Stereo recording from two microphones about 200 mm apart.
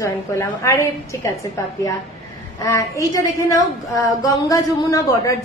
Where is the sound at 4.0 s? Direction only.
15° left (ahead or behind).